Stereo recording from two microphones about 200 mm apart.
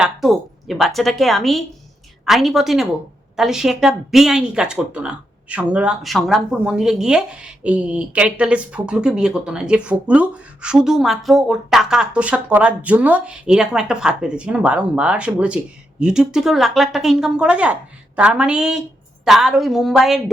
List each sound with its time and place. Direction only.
0.0 s speech: centre (ahead or behind)